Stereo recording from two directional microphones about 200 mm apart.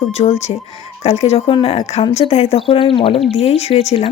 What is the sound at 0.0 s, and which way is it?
A woman's voice, 30° left (ahead or behind).